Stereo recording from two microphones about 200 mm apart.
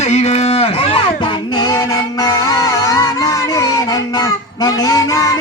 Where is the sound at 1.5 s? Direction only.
20° left (ahead or behind).